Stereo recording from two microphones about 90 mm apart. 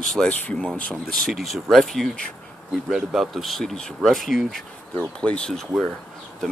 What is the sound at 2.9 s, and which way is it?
Speech, 5° right (ahead or behind).